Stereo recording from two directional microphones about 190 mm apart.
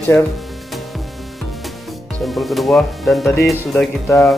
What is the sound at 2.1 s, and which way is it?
Speech, centre (ahead or behind).